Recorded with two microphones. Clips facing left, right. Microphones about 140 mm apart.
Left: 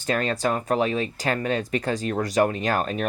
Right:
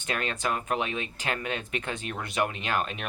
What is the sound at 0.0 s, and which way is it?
Speech, 35° left (ahead or behind).